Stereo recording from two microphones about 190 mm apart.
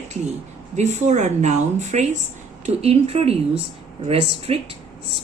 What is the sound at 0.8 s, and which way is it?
Speech, 35° right (ahead or behind).